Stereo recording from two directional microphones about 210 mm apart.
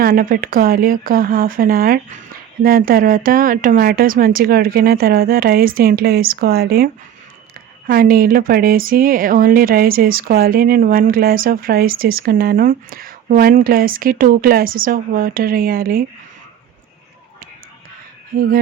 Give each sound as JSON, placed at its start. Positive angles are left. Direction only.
{"t": 0.0, "sound": "speech", "side_deg": -40}